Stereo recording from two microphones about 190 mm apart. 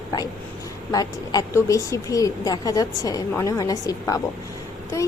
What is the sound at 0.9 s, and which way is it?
A woman's voice, 20° left (ahead or behind).